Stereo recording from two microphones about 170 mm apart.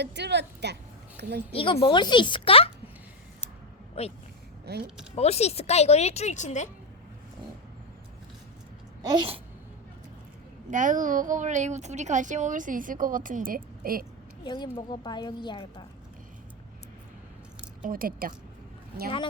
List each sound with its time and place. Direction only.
0.0 s a woman's voice: 85° right
1.5 s speech: 30° left (ahead or behind)
4.0 s speech: 35° left (ahead or behind)
4.6 s speech: 70° right (ahead or behind)
5.1 s speech: 40° left (ahead or behind)
9.0 s babbling: 25° right (ahead or behind)
10.7 s a woman's voice: 50° right (ahead or behind)
14.4 s a woman's voice: 25° left (ahead or behind)
17.8 s a woman's voice: 60° right (ahead or behind)